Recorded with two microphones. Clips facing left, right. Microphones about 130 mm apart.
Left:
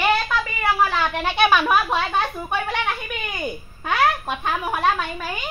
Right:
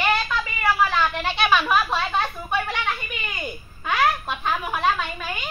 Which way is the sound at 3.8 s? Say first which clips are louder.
Left 1 dB; 40° left (ahead or behind).